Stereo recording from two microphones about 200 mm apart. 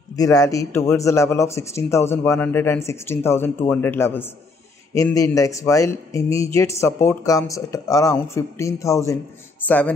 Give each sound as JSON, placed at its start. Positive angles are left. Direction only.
{"t": 0.1, "sound": "speech", "side_deg": 15}